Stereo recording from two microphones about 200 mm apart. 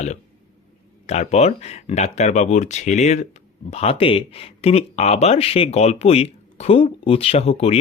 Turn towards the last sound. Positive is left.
turn(degrees=30)  # may be behind; listen again after turning